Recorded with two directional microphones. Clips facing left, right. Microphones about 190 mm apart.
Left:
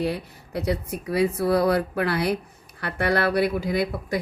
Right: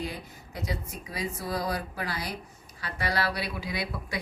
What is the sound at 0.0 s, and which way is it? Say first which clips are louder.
Speech: left 9 dB; 65° left (ahead or behind).